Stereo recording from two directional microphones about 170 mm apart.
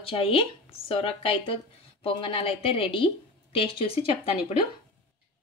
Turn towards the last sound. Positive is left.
turn(degrees=35)  # may be behind; listen again after turning